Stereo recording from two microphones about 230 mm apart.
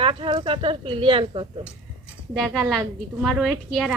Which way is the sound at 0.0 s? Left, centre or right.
Right.